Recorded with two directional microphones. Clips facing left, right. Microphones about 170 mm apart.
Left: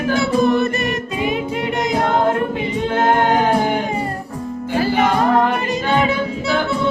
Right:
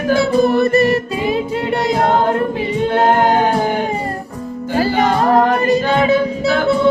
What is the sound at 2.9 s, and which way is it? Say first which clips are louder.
Music: right 2 dB; 35° right (ahead or behind).